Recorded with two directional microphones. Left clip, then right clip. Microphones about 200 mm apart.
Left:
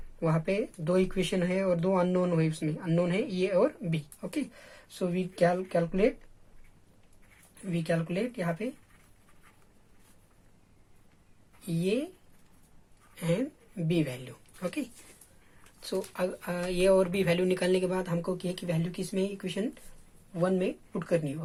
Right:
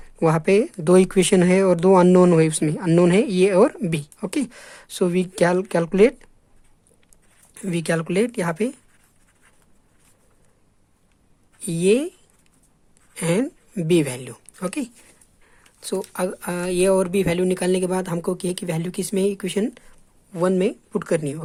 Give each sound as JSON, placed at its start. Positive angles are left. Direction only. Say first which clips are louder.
{"t": 0.2, "sound": "speech", "louder": "right 12 dB", "side_deg": -45}
{"t": 7.5, "sound": "speech", "louder": "right 8 dB", "side_deg": -50}
{"t": 11.6, "sound": "speech", "louder": "right 12 dB", "side_deg": -45}
{"t": 13.1, "sound": "a woman's voice", "louder": "right 9 dB", "side_deg": -45}